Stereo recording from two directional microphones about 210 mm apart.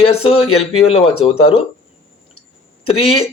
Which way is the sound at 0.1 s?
25° left (ahead or behind).